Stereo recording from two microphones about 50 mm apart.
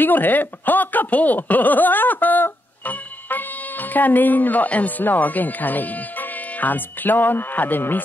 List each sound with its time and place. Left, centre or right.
0.0 s speech: left